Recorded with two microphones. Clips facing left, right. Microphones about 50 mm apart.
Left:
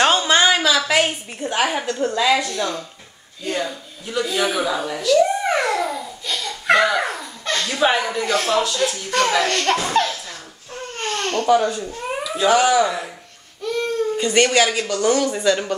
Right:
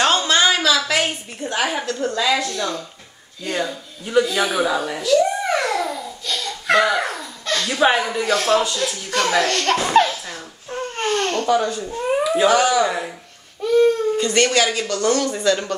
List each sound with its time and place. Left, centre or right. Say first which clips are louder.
0.0 s a sound: left 1 dB; centre
2.1 s speech: left 2 dB; centre
5.1 s babbling: left 1 dB; centre
7.5 s speech: right 1 dB; centre
9.8 s speech: right 4 dB; centre
10.7 s a sound: right 4 dB; centre
11.4 s speech: left 2 dB; centre
11.9 s babbling: right 7 dB; centre
12.4 s speech: left 3 dB; centre
12.8 s speech: right 1 dB; centre
14.1 s speech: left 1 dB; centre